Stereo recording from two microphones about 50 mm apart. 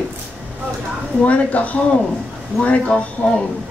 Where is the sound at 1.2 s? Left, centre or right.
Left.